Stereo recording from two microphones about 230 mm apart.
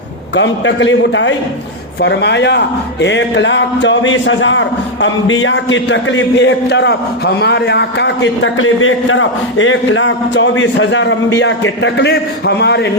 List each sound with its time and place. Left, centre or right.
0.3 s a man's voice: left